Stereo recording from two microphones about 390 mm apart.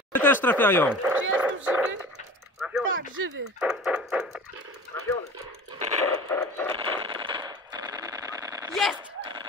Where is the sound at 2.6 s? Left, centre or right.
Centre.